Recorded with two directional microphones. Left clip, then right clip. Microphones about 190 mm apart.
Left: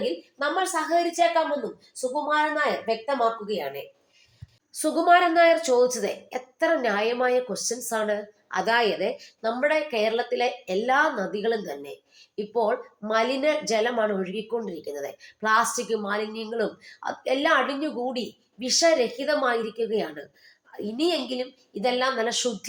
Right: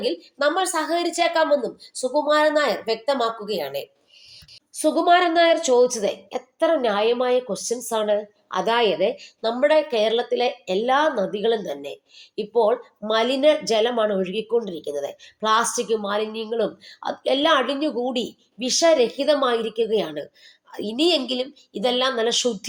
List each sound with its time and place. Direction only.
0.0 s speech: 40° right (ahead or behind)
4.7 s speech: 25° right (ahead or behind)